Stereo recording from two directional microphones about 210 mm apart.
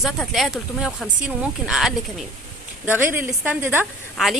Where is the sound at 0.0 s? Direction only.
Centre (ahead or behind).